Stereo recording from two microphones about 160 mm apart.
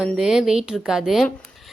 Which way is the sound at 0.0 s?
5° right (ahead or behind).